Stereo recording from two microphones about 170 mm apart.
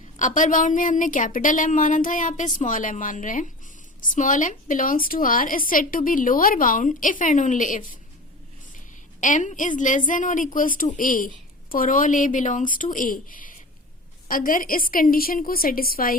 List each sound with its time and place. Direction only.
0.2 s a woman's voice: 50° left (ahead or behind)
9.2 s a woman's voice: 50° left (ahead or behind)